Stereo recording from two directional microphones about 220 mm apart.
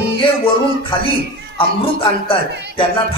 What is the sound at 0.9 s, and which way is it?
A man's voice, 25° left (ahead or behind).